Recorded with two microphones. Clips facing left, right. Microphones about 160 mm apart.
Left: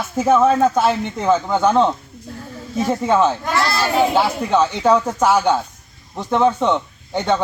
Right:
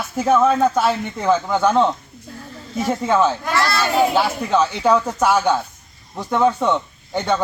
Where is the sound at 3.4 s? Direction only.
Centre (ahead or behind).